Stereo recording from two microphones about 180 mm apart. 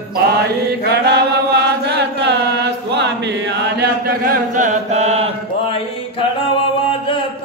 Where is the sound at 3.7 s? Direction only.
55° right (ahead or behind); by 5.3 s 35° right (ahead or behind).